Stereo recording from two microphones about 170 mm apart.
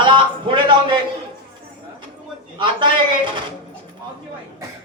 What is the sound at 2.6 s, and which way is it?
Speech, 30° right (ahead or behind).